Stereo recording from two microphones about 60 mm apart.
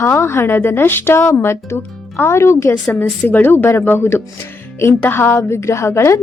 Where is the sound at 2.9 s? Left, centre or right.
Left.